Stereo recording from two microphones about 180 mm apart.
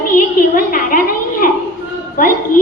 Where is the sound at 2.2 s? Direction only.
50° left (ahead or behind).